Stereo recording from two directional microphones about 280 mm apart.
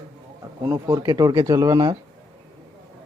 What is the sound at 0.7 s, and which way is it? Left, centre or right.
Speech, centre.